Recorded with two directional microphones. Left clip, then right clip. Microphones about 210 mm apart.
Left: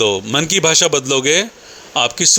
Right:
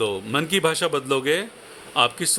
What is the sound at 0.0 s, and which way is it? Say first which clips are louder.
A man's voice: left 8 dB; 20° left (ahead or behind).